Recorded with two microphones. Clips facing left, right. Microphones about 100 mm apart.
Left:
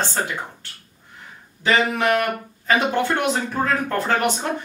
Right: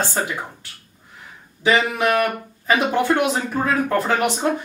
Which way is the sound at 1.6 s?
15° right (ahead or behind).